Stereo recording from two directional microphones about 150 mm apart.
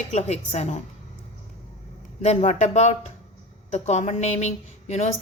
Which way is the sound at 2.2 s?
45° left (ahead or behind).